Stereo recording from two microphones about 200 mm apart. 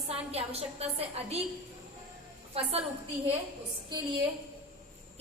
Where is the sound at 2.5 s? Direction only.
30° right (ahead or behind).